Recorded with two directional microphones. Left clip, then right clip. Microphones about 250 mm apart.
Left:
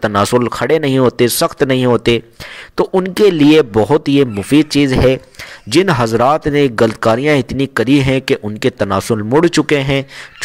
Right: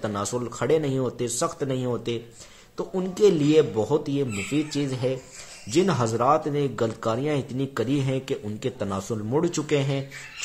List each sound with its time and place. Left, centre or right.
0.0 s speech: left